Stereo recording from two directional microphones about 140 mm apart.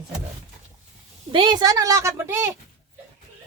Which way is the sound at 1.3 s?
35° right (ahead or behind).